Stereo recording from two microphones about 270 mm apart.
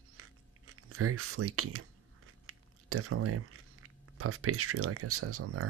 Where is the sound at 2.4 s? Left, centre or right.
Right.